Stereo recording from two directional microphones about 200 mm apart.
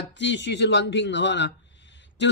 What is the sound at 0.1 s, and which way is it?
A man's voice, 60° left (ahead or behind).